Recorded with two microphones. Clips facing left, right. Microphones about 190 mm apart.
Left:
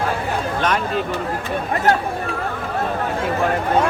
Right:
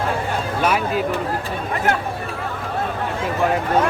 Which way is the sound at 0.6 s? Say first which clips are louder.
Right 2 dB; 10° right (ahead or behind).